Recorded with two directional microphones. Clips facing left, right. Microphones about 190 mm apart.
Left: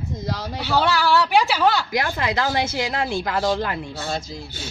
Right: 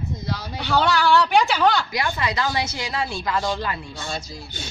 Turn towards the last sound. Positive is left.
turn(degrees=65)  # may be behind; listen again after turning